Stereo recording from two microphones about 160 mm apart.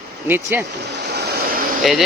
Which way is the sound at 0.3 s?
15° right (ahead or behind).